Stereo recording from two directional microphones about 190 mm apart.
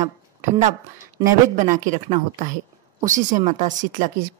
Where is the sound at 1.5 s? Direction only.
40° right (ahead or behind).